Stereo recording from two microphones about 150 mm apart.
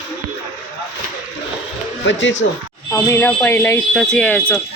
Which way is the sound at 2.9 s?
15° left (ahead or behind).